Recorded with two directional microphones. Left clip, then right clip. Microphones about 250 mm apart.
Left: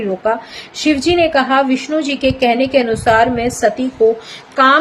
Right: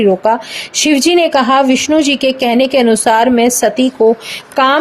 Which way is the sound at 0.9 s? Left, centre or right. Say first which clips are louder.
Right 2 dB; right.